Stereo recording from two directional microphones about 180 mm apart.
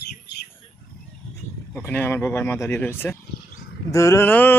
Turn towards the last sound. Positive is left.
turn(degrees=10)  # may be behind; listen again after turning